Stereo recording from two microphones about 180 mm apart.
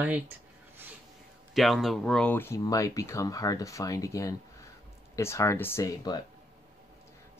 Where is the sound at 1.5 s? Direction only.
Centre (ahead or behind); by 6.2 s 20° left (ahead or behind).